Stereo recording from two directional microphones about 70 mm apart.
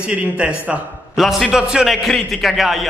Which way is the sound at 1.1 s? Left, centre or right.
Centre.